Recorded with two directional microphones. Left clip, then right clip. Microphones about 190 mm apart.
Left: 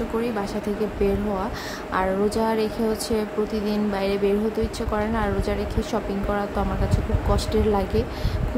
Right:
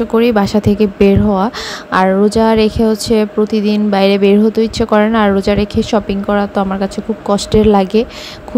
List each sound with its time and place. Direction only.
0.2 s a woman's voice: 45° right (ahead or behind)